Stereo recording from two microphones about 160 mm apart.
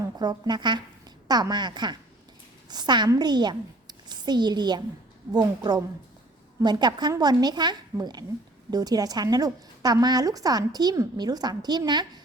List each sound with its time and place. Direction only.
0.2 s a woman's voice: 25° right (ahead or behind)